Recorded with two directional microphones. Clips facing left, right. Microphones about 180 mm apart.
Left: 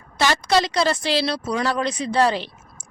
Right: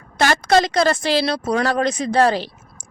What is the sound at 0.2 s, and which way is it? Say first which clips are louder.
Speech: right 3 dB; 50° right (ahead or behind).